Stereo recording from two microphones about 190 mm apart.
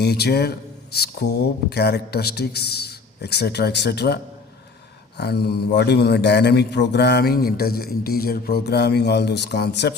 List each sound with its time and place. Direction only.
0.0 s speech: 60° left (ahead or behind)